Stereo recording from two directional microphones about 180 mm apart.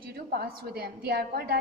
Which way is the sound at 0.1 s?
60° right (ahead or behind).